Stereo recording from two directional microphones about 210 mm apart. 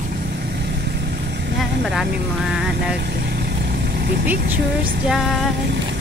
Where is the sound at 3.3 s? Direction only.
50° right (ahead or behind).